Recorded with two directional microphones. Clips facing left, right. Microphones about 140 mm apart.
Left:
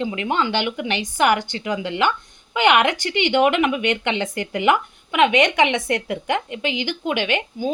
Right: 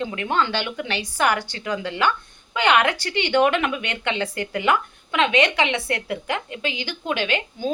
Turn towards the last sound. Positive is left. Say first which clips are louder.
# left 2 dB
turn(degrees=15)  # may be behind; listen again after turning